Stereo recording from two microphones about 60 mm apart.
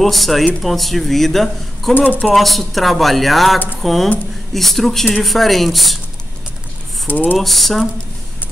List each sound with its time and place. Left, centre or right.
0.0 s speech: centre
2.0 s speech: left
2.3 s speech: centre
7.1 s speech: left
7.3 s speech: centre